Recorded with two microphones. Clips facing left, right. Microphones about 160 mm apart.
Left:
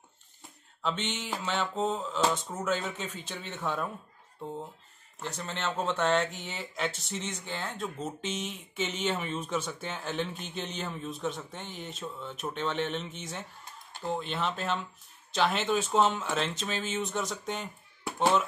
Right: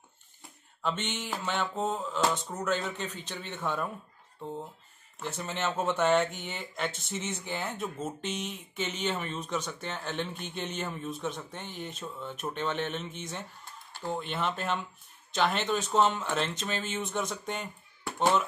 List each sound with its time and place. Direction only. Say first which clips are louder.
0.8 s speech: even; centre (ahead or behind)